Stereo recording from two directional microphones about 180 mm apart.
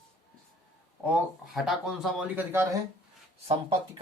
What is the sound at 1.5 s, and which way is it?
Speech, centre (ahead or behind).